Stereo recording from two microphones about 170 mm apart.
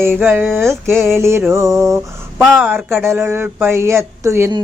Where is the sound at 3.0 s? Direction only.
15° right (ahead or behind).